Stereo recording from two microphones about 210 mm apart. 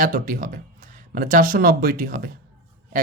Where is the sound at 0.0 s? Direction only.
40° right (ahead or behind).